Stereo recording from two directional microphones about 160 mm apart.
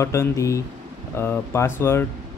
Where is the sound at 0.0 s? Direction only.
15° left (ahead or behind).